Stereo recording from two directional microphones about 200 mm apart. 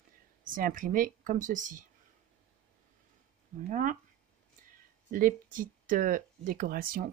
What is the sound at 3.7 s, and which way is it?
Speech, 40° right (ahead or behind).